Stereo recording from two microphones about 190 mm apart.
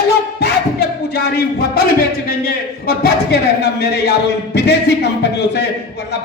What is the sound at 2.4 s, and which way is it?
A man's voice, 55° left (ahead or behind).